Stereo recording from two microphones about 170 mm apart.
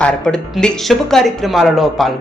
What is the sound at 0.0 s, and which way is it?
Speech, 5° left (ahead or behind).